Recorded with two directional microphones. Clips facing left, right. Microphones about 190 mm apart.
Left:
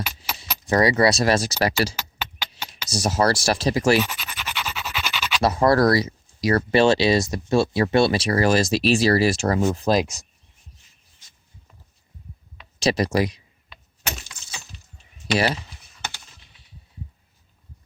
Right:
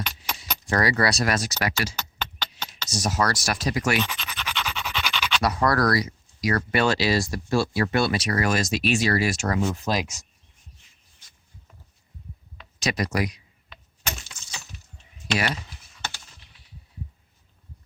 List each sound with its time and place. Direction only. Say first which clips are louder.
0.3 s keys jangling: left 1 dB; 5° left (ahead or behind)
0.6 s speech: left 5 dB; 20° left (ahead or behind)
2.0 s a sound: left 1 dB; 10° left (ahead or behind)
2.9 s speech: left 5 dB; 30° left (ahead or behind)
4.0 s scratch: even; 5° left (ahead or behind)
5.4 s speech: left 5 dB; 25° left (ahead or behind)
12.8 s speech: left 5 dB; 30° left (ahead or behind)